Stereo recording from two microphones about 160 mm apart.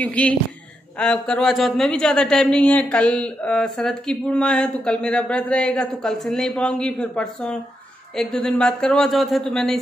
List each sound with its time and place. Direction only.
0.0 s a man's voice: 10° left (ahead or behind)